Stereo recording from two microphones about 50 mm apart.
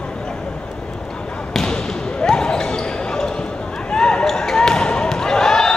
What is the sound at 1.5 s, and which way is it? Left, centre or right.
Basketball bounce, centre.